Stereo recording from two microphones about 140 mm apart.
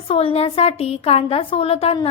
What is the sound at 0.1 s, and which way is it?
Speech, 40° left (ahead or behind).